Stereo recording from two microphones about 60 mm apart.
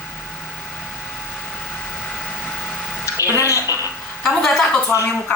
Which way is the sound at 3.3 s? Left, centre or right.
Left.